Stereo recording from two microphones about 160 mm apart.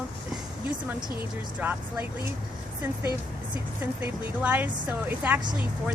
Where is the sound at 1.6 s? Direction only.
10° right (ahead or behind).